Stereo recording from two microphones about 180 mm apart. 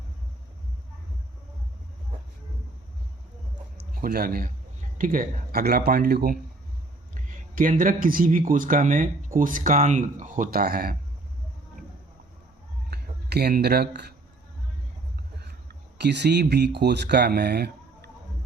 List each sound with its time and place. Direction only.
4.0 s speech: 55° right (ahead or behind)
7.1 s speech: 50° right (ahead or behind)
12.9 s speech: 65° right (ahead or behind)
16.0 s speech: 70° right (ahead or behind)